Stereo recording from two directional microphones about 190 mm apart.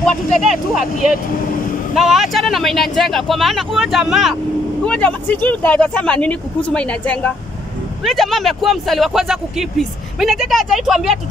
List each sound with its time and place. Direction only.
0.0 s speech: centre (ahead or behind)